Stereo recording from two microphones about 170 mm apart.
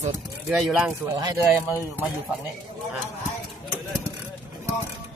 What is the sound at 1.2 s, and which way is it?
Speech, 20° right (ahead or behind).